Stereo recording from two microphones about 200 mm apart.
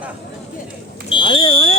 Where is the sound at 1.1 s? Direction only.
25° left (ahead or behind).